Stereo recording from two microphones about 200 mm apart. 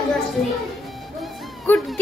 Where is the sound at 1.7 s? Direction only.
10° left (ahead or behind).